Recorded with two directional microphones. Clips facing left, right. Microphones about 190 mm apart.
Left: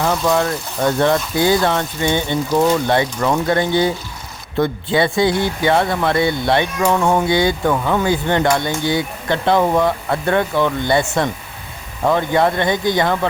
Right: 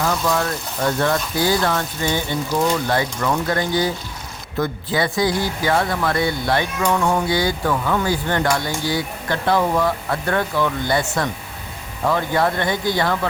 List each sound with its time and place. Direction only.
0.0 s speech: 25° left (ahead or behind)
12.0 s speech: 20° left (ahead or behind)